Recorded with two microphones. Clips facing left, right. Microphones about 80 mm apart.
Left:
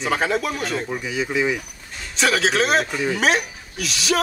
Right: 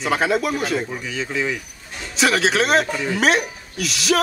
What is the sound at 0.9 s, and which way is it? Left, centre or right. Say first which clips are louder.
Speech: left 2 dB; centre.